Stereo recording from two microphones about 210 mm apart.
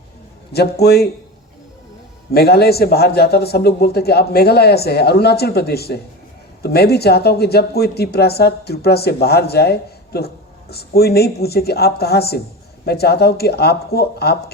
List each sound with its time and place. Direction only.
0.5 s speech: 50° left (ahead or behind)
2.3 s speech: 50° left (ahead or behind)